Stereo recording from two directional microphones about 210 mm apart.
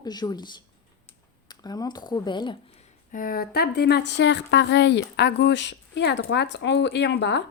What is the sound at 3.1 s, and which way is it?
A woman's voice, 40° left (ahead or behind).